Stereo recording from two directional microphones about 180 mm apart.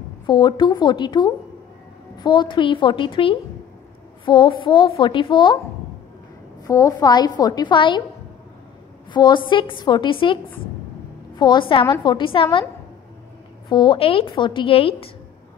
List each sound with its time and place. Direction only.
0.3 s a woman's voice: 25° left (ahead or behind)
6.6 s a woman's voice: 20° left (ahead or behind)
9.1 s a woman's voice: 25° left (ahead or behind)
13.7 s a woman's voice: 25° left (ahead or behind)